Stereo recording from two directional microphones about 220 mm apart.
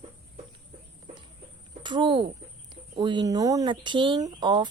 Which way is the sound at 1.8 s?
20° right (ahead or behind).